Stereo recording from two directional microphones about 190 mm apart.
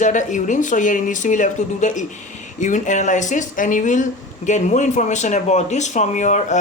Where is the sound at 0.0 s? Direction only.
40° left (ahead or behind).